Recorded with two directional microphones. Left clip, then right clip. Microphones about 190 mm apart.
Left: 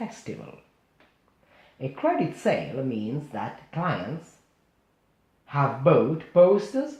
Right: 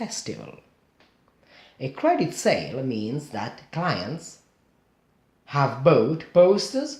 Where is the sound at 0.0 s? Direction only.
35° right (ahead or behind).